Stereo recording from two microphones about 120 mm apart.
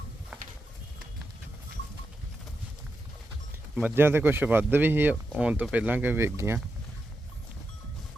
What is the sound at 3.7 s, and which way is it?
Speech, 15° right (ahead or behind).